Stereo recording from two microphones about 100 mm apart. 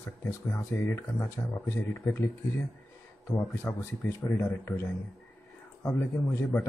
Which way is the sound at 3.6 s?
20° left (ahead or behind).